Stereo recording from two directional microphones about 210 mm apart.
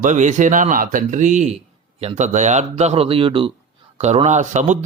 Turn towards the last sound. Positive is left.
turn(degrees=-35)  # may be behind; listen again after turning